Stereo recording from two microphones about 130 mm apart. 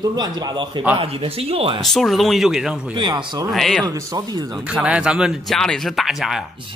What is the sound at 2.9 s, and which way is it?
Speech, 35° right (ahead or behind).